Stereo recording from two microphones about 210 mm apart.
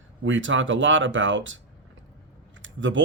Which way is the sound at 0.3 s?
65° right (ahead or behind).